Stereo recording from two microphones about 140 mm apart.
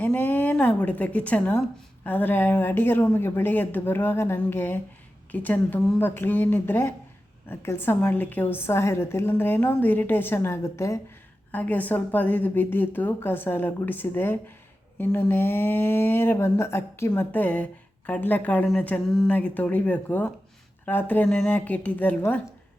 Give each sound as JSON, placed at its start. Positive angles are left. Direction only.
{"t": 0.0, "sound": "speech", "side_deg": 15}